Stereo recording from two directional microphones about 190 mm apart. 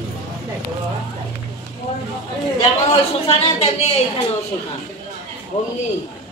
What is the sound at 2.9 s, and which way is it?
Speech, 30° left (ahead or behind).